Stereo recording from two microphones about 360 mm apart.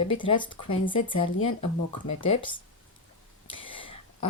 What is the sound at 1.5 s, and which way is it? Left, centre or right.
Speech, left.